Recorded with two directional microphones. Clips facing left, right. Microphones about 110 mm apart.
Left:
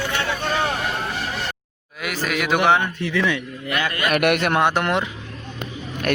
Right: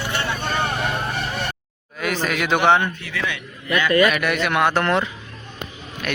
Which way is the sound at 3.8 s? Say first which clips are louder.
Right 3 dB; 55° left (ahead or behind).